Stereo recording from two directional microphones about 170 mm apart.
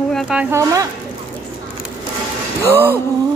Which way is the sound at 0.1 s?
5° right (ahead or behind).